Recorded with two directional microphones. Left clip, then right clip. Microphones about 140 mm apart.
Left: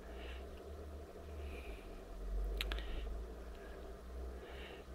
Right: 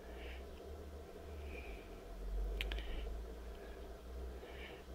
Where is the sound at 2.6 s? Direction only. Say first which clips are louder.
Left 2 dB; 10° right (ahead or behind).